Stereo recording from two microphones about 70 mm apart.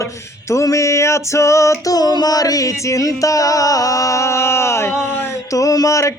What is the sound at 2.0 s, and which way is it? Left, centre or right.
Mantra, left.